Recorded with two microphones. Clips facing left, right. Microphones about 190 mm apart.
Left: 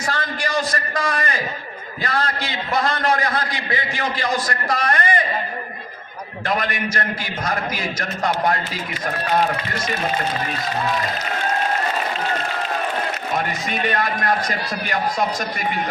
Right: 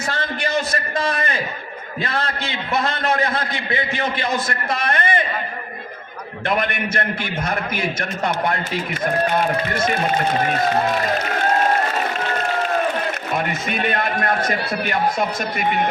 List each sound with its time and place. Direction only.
0.1 s a sound: 25° right (ahead or behind)
2.0 s a man's voice: 25° right (ahead or behind)
10.4 s a man's voice: 55° right (ahead or behind)
13.7 s a man's voice: 55° right (ahead or behind)